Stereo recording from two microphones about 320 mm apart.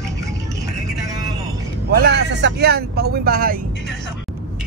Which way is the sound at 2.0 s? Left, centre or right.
Right.